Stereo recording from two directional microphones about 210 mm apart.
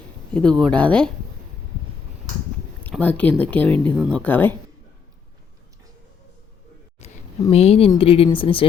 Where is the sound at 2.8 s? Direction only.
10° left (ahead or behind).